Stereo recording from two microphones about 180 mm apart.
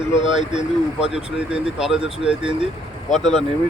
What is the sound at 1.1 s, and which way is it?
Speech, 5° right (ahead or behind).